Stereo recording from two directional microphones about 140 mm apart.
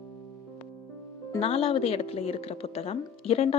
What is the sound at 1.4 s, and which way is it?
A woman's voice, 45° left (ahead or behind).